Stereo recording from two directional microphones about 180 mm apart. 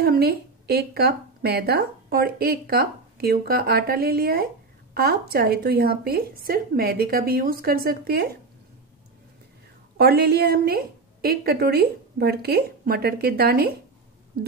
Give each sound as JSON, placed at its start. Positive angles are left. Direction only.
{"t": 0.0, "sound": "a woman's voice", "side_deg": -60}
{"t": 9.9, "sound": "a woman's voice", "side_deg": -60}